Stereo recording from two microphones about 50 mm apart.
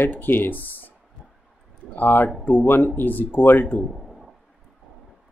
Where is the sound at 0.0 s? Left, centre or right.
Left.